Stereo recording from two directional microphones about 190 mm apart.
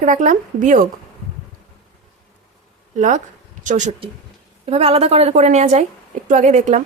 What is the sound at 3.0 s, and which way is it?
A woman's voice, 40° right (ahead or behind).